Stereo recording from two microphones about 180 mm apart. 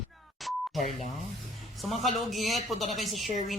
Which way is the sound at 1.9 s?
Centre (ahead or behind).